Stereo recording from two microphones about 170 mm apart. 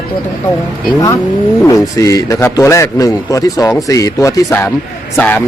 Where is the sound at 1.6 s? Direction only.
20° left (ahead or behind).